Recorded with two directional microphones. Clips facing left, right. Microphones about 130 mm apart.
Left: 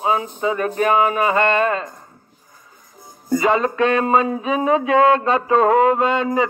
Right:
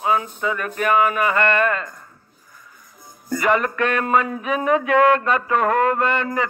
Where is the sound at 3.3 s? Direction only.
20° left (ahead or behind).